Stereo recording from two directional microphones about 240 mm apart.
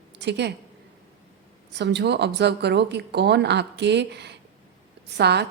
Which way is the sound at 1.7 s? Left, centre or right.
Right.